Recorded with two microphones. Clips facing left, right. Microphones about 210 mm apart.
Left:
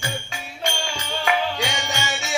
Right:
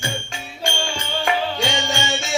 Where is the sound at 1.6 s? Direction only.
25° right (ahead or behind).